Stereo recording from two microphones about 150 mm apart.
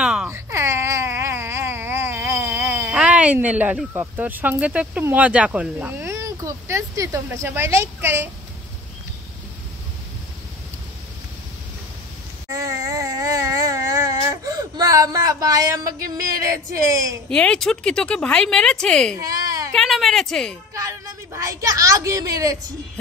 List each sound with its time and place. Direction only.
0.0 s wail: 5° right (ahead or behind)
0.3 s wail: 20° right (ahead or behind)
4.0 s speech: 10° right (ahead or behind)
12.4 s a sound: 20° right (ahead or behind)
17.3 s speech: 5° left (ahead or behind)
19.1 s baby cry: 25° right (ahead or behind)
19.7 s speech: centre (ahead or behind)
20.7 s a woman's voice: 20° right (ahead or behind)